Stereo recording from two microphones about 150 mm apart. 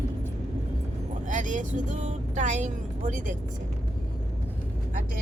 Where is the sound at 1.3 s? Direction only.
55° right (ahead or behind).